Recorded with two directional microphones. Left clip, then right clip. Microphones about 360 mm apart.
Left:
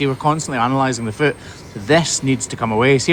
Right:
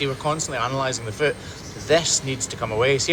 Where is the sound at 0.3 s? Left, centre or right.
Left.